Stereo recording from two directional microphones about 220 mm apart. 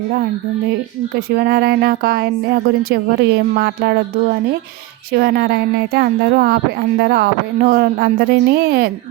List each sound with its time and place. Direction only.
1.1 s speech: 45° right (ahead or behind)
5.1 s speech: 45° right (ahead or behind)